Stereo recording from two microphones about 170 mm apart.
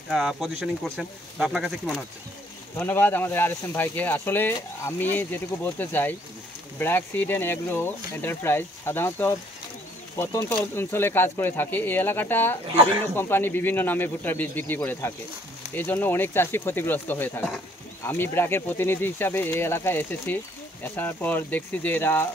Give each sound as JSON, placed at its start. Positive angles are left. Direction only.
{"t": 0.1, "sound": "speech", "side_deg": 0}
{"t": 2.8, "sound": "speech", "side_deg": 10}
{"t": 12.7, "sound": "speech", "side_deg": -35}
{"t": 13.1, "sound": "speech", "side_deg": 15}